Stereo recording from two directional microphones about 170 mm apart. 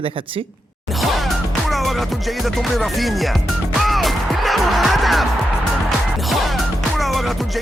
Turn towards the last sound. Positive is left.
turn(degrees=0)  # may be behind; listen again after turning